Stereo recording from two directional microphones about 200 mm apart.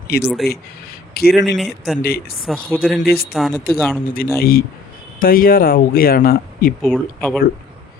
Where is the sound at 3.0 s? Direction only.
50° left (ahead or behind).